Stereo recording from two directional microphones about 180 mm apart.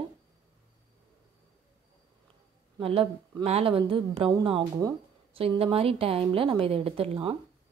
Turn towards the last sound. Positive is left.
turn(degrees=-30)  # may be behind; listen again after turning